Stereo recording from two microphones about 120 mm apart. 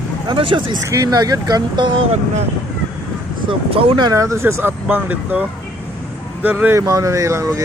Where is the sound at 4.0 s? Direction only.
25° right (ahead or behind).